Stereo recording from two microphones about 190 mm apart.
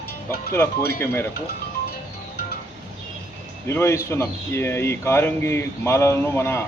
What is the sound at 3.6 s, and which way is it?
Speech, 15° left (ahead or behind).